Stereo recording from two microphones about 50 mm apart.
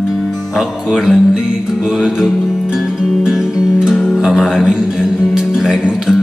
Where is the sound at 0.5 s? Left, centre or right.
Centre.